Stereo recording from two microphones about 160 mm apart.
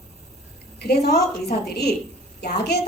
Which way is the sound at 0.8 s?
90° left.